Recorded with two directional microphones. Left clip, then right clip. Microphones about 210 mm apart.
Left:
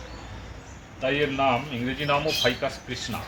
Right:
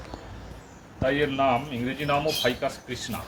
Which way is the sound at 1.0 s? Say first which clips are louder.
Even; centre (ahead or behind).